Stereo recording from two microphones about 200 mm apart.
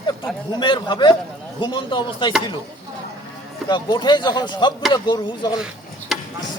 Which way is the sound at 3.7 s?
20° left (ahead or behind).